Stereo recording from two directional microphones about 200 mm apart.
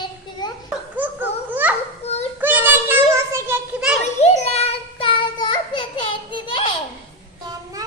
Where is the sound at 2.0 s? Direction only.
30° left (ahead or behind).